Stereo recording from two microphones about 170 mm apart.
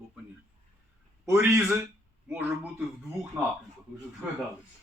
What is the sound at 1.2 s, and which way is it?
Speech, 15° right (ahead or behind).